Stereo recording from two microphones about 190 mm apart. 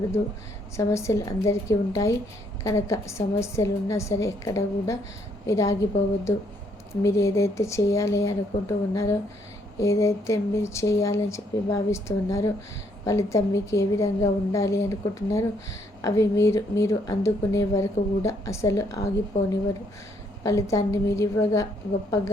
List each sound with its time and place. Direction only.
0.8 s speech: 15° left (ahead or behind)
7.0 s speech: 15° left (ahead or behind)